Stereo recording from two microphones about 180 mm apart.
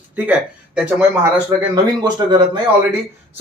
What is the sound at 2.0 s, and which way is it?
Speech, 25° right (ahead or behind).